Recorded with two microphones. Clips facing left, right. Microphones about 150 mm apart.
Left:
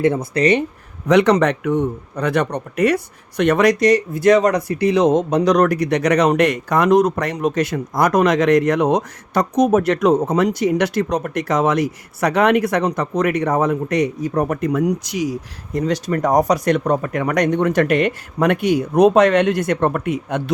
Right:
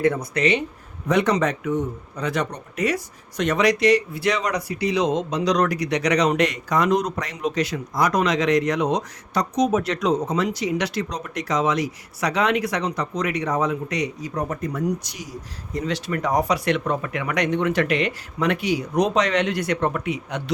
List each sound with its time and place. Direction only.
0.0 s speech: 25° left (ahead or behind)
1.0 s a man's voice: 75° left (ahead or behind); by 15.4 s 90° left
15.7 s a man's voice: 45° left (ahead or behind)